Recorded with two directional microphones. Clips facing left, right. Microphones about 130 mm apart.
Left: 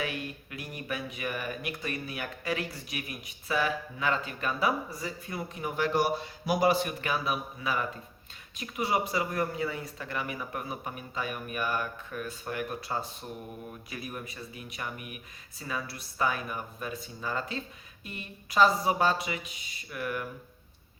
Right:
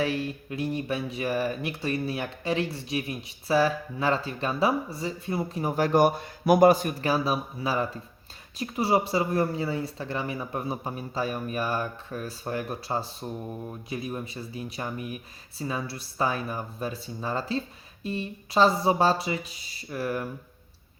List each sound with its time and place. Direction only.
0.0 s speech: 30° right (ahead or behind)